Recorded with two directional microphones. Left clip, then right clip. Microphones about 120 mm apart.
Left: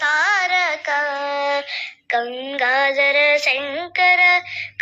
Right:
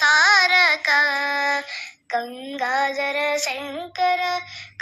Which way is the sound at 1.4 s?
10° right (ahead or behind).